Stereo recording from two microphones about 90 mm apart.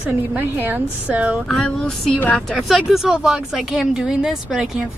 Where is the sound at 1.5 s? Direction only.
5° left (ahead or behind).